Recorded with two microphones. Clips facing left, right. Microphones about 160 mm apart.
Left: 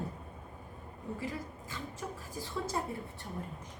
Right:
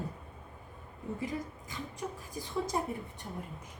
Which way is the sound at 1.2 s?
20° right (ahead or behind).